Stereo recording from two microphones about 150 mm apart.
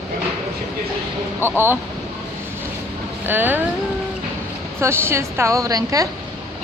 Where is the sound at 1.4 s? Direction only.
15° right (ahead or behind).